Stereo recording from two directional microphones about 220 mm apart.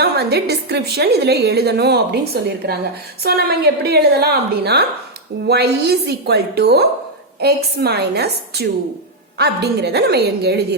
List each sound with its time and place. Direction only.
0.0 s a woman's voice: 45° right (ahead or behind)